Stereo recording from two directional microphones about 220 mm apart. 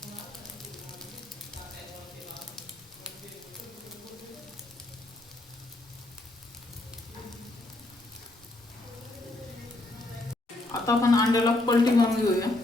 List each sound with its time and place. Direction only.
10.7 s a man's voice: 15° left (ahead or behind)